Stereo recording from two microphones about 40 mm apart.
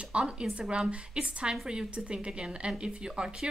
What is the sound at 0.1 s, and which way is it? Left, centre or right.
A woman's voice, right.